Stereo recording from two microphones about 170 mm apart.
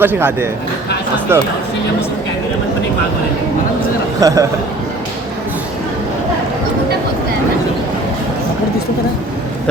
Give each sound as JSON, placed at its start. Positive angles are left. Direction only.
{"t": 0.0, "sound": "a man's voice", "side_deg": -10}
{"t": 4.2, "sound": "a man's voice", "side_deg": -20}